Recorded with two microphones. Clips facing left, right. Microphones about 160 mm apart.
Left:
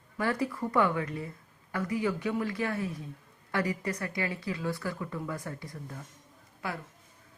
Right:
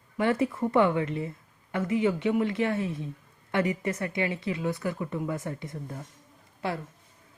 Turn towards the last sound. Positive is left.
turn(degrees=-25)  # may be behind; listen again after turning